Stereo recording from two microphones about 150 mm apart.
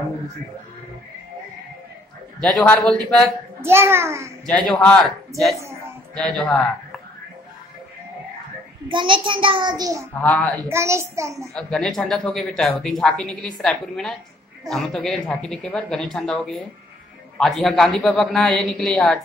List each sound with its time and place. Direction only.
2.4 s speech: 5° left (ahead or behind)
3.6 s a child's voice: 15° right (ahead or behind)
4.5 s a man's voice: 5° left (ahead or behind)
6.1 s a man's voice: 5° left (ahead or behind)
8.8 s a child's voice: 35° right (ahead or behind)
10.2 s a man's voice: 10° left (ahead or behind)
10.7 s a child's voice: 20° right (ahead or behind)
11.5 s speech: 5° left (ahead or behind)